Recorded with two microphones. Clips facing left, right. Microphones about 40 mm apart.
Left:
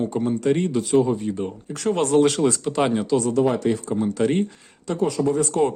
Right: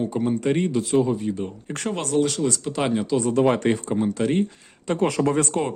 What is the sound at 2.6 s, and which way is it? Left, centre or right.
Speech, centre.